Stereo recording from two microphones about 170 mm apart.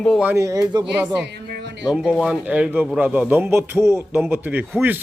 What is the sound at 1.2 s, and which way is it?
Music, 85° right.